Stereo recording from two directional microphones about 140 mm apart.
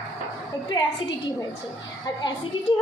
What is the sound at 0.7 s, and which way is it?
Speech, 25° left (ahead or behind).